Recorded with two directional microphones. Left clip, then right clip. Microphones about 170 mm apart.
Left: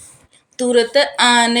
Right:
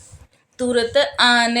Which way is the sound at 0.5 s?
20° left (ahead or behind).